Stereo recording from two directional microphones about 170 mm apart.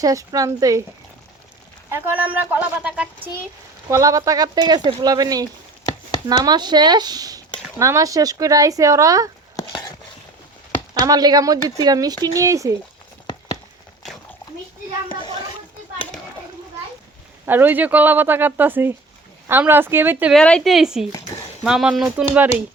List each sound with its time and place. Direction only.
0.0 s speech: 20° right (ahead or behind)
1.9 s speech: 10° right (ahead or behind)
3.8 s speech: 20° right (ahead or behind)
9.6 s a sound: 25° left (ahead or behind)
11.0 s speech: 25° right (ahead or behind)
17.4 s speech: 10° right (ahead or behind)
20.3 s speech: 5° left (ahead or behind)